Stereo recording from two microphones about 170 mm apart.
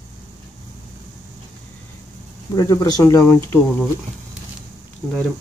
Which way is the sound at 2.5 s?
20° left (ahead or behind).